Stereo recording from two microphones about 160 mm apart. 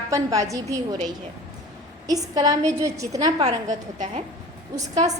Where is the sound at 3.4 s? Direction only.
50° right (ahead or behind).